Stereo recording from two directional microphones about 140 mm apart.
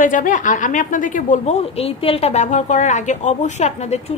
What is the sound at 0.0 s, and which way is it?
A woman's voice, 70° left (ahead or behind).